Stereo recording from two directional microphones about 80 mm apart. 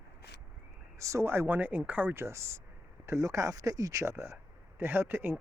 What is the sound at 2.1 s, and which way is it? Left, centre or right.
Speech, right.